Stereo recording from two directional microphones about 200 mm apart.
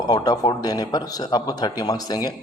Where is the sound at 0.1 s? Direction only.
20° left (ahead or behind).